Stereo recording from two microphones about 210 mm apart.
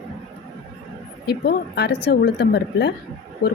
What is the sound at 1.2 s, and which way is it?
A woman's voice, 50° left (ahead or behind).